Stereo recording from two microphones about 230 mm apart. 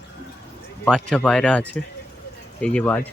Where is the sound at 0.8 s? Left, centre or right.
Centre.